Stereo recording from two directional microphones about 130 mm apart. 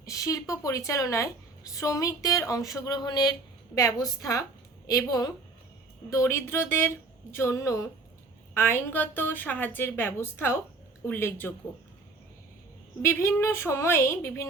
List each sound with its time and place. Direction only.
0.0 s a woman's voice: 25° left (ahead or behind)
13.0 s a woman's voice: 20° left (ahead or behind)